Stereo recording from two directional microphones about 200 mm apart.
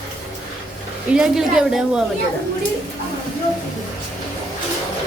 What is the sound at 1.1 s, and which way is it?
Speech, 5° right (ahead or behind).